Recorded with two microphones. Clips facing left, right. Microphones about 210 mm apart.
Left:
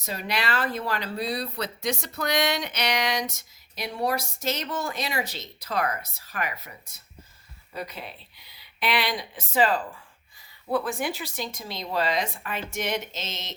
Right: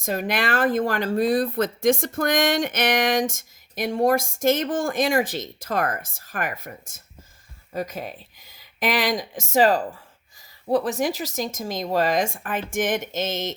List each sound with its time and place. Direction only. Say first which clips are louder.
0.0 s speech: right 6 dB; 50° right (ahead or behind)